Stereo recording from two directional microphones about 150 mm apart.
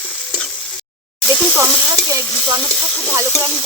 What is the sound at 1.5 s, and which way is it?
Sizzle, 20° right (ahead or behind).